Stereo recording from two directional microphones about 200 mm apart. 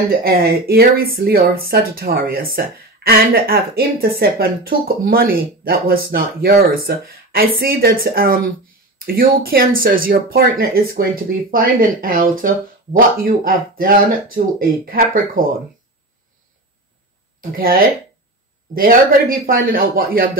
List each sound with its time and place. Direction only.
0.2 s speech: 50° right (ahead or behind)
17.4 s speech: 45° right (ahead or behind)